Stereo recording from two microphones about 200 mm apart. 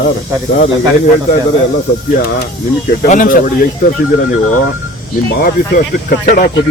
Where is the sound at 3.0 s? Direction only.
40° left (ahead or behind).